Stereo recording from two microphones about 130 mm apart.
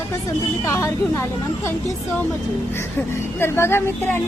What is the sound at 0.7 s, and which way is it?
Speech, 20° left (ahead or behind).